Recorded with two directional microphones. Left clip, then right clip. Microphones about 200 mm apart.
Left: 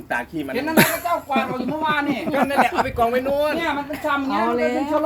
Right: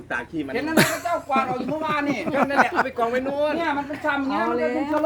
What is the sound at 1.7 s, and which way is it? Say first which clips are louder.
Speech: left 3 dB; 45° right (ahead or behind).